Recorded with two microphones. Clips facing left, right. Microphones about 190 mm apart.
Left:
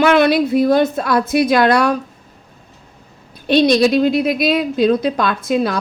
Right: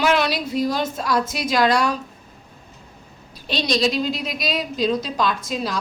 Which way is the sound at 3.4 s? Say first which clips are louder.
Left 9 dB; 60° left (ahead or behind).